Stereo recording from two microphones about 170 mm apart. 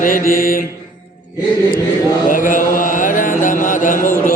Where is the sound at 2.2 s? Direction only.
50° left (ahead or behind).